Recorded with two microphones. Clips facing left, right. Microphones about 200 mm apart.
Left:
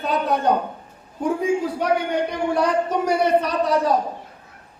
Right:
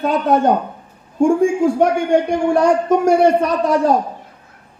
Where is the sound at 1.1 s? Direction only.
50° right (ahead or behind).